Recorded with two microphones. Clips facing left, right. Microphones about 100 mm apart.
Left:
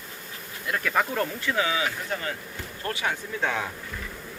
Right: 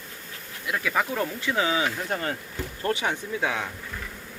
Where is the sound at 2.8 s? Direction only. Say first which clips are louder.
Right 3 dB; 25° right (ahead or behind).